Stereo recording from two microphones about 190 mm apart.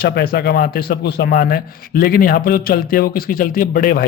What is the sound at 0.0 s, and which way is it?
Speech, 60° left (ahead or behind).